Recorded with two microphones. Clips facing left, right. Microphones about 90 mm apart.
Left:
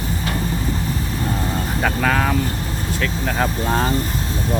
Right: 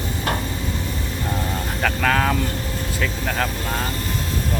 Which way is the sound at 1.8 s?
5° left (ahead or behind).